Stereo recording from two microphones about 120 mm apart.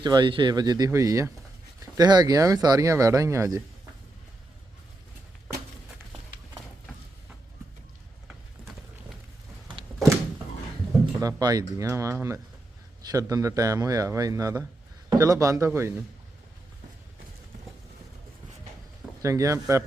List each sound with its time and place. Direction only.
0.0 s speech: 40° right (ahead or behind)
11.2 s speech: 30° right (ahead or behind)
19.2 s speech: 25° right (ahead or behind)